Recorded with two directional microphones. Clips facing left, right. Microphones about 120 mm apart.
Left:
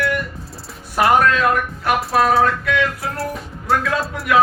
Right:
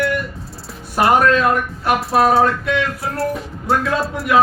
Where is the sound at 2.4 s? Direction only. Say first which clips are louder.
Right 1 dB; 30° right (ahead or behind).